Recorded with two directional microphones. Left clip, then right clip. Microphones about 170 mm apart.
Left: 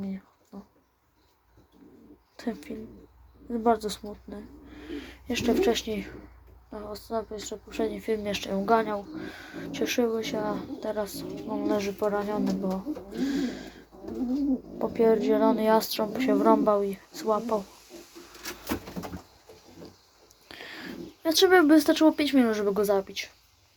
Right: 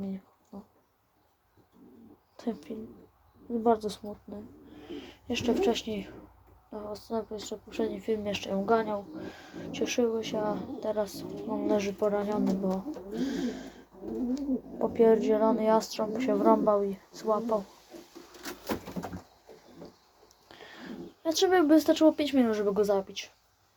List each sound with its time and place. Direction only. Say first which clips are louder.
0.5 s a sound: left 1 dB; 10° right (ahead or behind)
2.3 s speech: left 1 dB; centre (ahead or behind)
20.5 s speech: left 5 dB; 20° left (ahead or behind)